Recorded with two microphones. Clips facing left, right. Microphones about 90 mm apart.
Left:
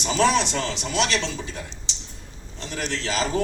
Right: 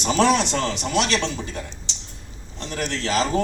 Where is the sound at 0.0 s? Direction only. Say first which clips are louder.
Right 2 dB; 55° right (ahead or behind).